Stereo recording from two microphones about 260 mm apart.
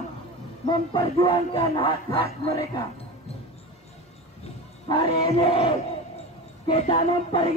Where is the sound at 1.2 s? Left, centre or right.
Centre.